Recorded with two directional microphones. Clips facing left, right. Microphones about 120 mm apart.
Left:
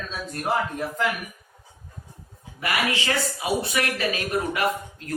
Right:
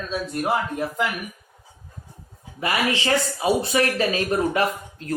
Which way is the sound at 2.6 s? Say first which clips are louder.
Right 3 dB; 30° right (ahead or behind).